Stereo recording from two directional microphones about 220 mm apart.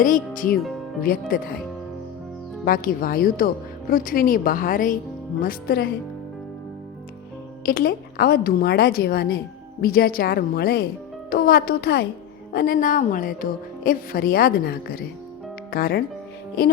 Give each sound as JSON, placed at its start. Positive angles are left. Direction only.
{"t": 0.0, "sound": "speech", "side_deg": 40}
{"t": 0.5, "sound": "speech", "side_deg": 0}
{"t": 1.0, "sound": "speech", "side_deg": 40}
{"t": 2.6, "sound": "speech", "side_deg": 40}
{"t": 7.6, "sound": "a woman's voice", "side_deg": 40}